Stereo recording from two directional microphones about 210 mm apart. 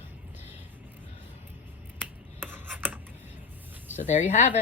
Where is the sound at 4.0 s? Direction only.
35° left (ahead or behind).